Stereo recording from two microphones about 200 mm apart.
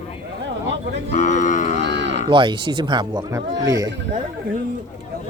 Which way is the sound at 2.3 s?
25° right (ahead or behind).